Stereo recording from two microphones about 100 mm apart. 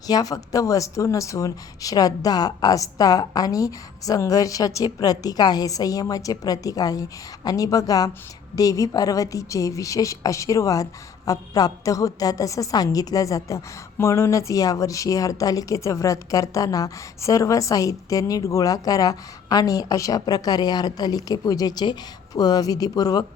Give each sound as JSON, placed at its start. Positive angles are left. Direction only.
{"t": 0.1, "sound": "speech", "side_deg": 40}